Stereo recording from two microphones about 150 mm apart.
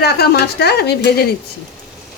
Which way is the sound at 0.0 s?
90° left.